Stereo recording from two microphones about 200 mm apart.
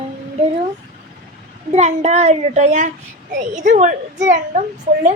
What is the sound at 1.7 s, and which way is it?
A child's voice, 35° right (ahead or behind).